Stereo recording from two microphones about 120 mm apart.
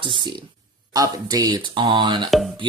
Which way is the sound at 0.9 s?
30° right (ahead or behind).